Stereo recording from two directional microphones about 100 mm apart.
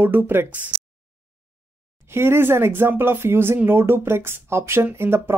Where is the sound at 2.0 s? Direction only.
25° right (ahead or behind).